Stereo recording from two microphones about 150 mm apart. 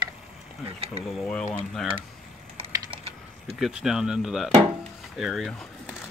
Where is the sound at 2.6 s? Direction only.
40° right (ahead or behind).